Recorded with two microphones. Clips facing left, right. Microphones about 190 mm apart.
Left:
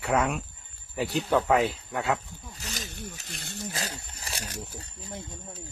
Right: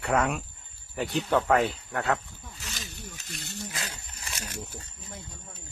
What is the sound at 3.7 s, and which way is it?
Speech, 35° left (ahead or behind).